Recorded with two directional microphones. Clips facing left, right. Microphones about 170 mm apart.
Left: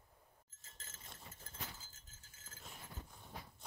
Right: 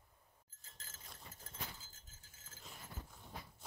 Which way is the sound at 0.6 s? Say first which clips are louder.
Even; centre (ahead or behind).